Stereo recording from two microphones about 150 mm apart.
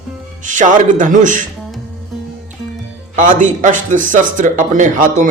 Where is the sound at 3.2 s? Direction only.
60° right (ahead or behind).